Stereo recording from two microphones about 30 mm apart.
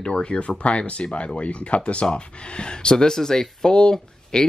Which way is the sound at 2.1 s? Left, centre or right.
Left.